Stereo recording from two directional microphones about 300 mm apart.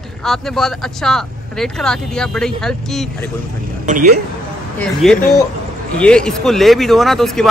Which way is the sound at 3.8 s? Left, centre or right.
Right.